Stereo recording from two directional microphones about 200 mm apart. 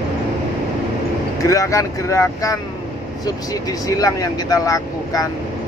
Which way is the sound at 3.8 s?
15° left (ahead or behind).